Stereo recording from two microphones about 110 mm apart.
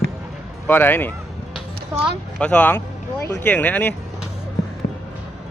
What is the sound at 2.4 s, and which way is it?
Speech, 10° left (ahead or behind).